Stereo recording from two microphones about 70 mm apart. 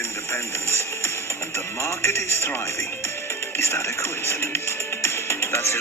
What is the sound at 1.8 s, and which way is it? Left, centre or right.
Speech, left.